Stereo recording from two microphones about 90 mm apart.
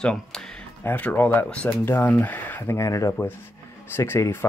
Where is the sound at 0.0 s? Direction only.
10° left (ahead or behind).